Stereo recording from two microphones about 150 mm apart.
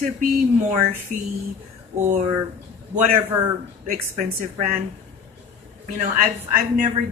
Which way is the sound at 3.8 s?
60° right (ahead or behind).